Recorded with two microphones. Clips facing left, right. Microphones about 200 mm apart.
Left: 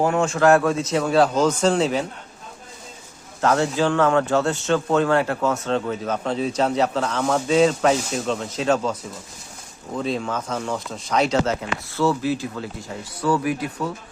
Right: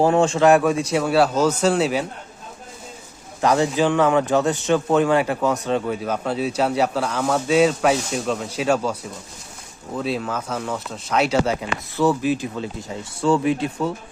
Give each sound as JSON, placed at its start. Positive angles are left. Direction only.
{"t": 0.0, "sound": "speech", "side_deg": -30}
{"t": 0.4, "sound": "speech", "side_deg": -15}
{"t": 3.4, "sound": "speech", "side_deg": -15}